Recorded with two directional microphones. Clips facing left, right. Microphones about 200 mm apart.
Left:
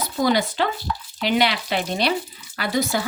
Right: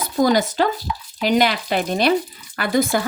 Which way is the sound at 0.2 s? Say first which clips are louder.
Right 4 dB; 45° right (ahead or behind).